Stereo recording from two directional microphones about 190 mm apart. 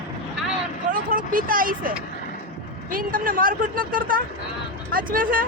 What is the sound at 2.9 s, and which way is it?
Speech, 45° right (ahead or behind).